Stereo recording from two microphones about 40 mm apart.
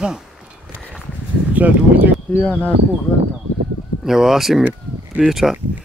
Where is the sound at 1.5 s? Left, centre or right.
Right.